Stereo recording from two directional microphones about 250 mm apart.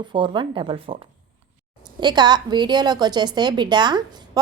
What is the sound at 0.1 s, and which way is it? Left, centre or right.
Speech, centre.